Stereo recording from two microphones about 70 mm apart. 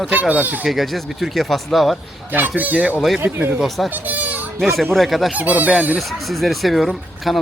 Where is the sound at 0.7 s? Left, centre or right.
Centre.